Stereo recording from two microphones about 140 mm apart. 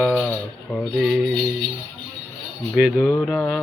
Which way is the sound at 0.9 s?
Centre (ahead or behind).